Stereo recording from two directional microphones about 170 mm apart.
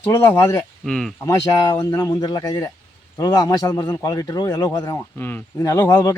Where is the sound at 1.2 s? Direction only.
20° left (ahead or behind).